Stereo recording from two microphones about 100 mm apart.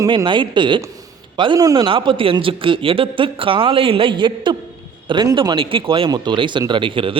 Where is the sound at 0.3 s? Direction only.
55° right (ahead or behind).